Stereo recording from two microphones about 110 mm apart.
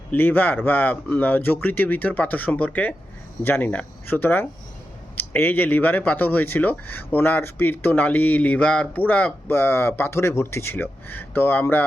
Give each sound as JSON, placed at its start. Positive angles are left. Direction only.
{"t": 0.1, "sound": "speech", "side_deg": 15}